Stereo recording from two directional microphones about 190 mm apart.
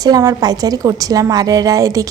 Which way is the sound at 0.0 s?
20° right (ahead or behind).